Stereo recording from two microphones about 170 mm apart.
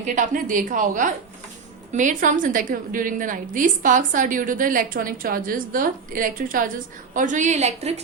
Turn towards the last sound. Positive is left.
turn(degrees=-40)  # may be behind; listen again after turning